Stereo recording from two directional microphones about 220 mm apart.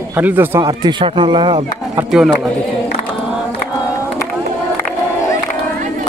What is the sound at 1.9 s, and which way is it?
Speech, 5° right (ahead or behind).